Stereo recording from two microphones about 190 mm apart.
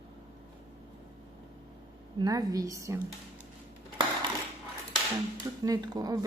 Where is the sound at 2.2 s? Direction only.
20° right (ahead or behind).